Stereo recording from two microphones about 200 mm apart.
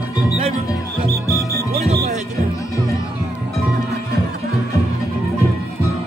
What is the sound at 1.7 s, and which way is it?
Music, 30° right (ahead or behind).